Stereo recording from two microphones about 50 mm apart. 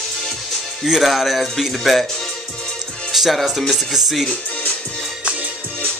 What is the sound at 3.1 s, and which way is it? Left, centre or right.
Music, centre.